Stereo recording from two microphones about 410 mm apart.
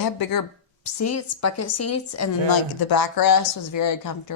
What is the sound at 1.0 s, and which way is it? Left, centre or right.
Speech, left.